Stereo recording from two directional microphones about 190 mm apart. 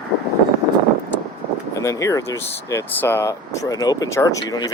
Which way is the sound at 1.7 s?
15° left (ahead or behind).